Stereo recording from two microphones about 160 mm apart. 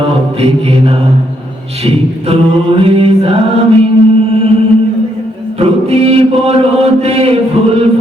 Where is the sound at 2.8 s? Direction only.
35° right (ahead or behind).